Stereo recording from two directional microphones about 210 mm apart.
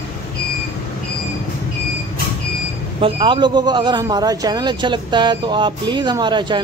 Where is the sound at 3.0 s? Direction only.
25° right (ahead or behind).